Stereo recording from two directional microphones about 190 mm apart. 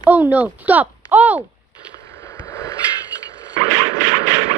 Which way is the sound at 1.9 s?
15° left (ahead or behind).